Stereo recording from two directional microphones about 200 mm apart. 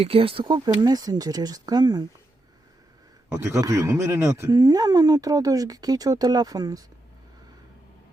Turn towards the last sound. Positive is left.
turn(degrees=-20)  # may be behind; listen again after turning